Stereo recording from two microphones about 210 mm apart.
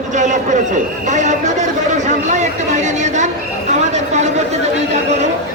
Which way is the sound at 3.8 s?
35° right (ahead or behind).